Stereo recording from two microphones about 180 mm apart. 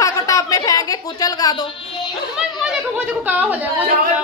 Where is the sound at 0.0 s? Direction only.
20° left (ahead or behind).